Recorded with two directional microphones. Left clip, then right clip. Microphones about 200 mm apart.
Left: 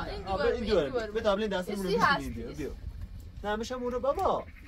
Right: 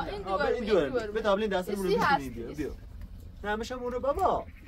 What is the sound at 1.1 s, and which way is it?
Speech, 15° right (ahead or behind).